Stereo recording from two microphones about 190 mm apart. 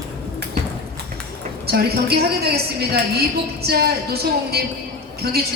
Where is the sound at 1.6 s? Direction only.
55° right (ahead or behind).